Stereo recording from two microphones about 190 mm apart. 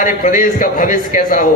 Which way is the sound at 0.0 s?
45° left (ahead or behind).